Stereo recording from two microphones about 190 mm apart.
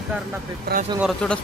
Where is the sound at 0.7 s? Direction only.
55° right (ahead or behind).